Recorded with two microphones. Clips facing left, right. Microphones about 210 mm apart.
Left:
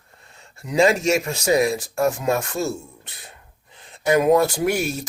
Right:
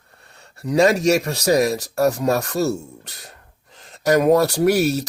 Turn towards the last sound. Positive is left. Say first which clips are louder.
# right 5 dB
turn(degrees=-40)  # may be behind; listen again after turning